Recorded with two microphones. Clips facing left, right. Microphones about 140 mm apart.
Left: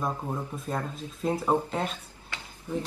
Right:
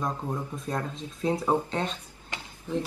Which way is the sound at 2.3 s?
20° right (ahead or behind).